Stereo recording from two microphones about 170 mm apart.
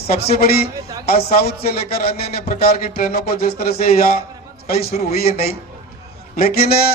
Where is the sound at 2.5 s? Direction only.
60° left (ahead or behind).